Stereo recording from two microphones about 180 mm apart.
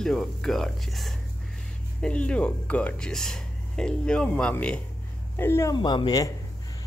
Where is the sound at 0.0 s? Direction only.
5° left (ahead or behind).